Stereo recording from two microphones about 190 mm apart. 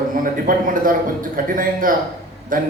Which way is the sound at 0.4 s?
45° right (ahead or behind).